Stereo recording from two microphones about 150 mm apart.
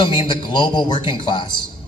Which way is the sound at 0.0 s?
30° left (ahead or behind).